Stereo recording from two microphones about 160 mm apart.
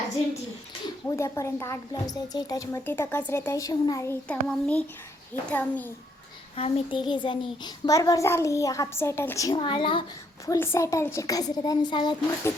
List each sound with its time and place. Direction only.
1.0 s speech: 15° left (ahead or behind)
6.6 s a child's voice: 30° left (ahead or behind)
10.4 s a child's voice: 15° left (ahead or behind)